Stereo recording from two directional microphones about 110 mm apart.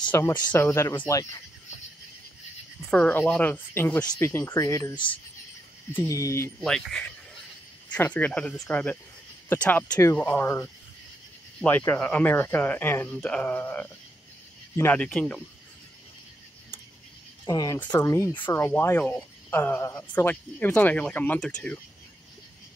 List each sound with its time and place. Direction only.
0.1 s speech: 25° left (ahead or behind)
2.9 s speech: 10° left (ahead or behind); by 4.9 s 30° left (ahead or behind)
4.9 s speech: 50° left (ahead or behind)
5.9 s speech: 30° left (ahead or behind)
6.6 s speech: 5° left (ahead or behind)
15.0 s speech: 10° left (ahead or behind)
17.5 s speech: 35° left (ahead or behind); by 21.7 s 5° left (ahead or behind)